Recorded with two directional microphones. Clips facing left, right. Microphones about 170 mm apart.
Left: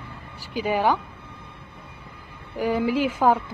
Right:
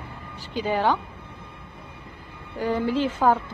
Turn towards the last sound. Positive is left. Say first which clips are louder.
# left 1 dB
turn(degrees=10)  # may be behind; listen again after turning